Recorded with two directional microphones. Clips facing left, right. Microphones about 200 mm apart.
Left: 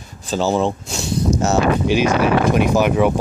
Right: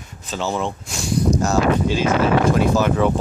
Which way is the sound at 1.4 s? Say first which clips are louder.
Left 4 dB; 20° left (ahead or behind).